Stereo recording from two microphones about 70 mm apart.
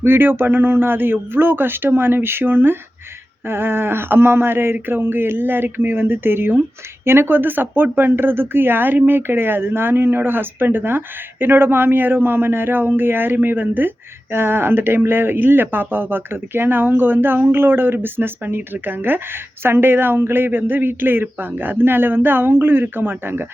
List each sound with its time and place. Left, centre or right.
0.0 s speech: right